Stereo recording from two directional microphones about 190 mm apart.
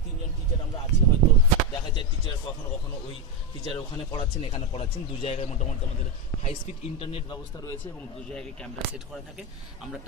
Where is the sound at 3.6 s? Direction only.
25° left (ahead or behind).